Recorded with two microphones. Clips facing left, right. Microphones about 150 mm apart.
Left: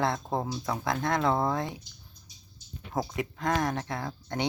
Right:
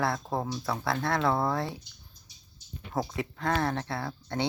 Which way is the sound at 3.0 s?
15° left (ahead or behind).